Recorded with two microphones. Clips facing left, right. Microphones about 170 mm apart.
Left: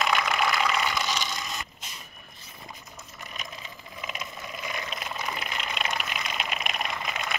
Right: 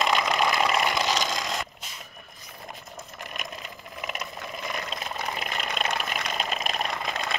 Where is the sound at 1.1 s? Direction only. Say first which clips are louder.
Right 5 dB; 90° right.